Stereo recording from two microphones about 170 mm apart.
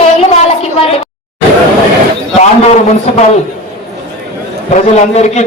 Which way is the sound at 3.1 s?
40° left (ahead or behind).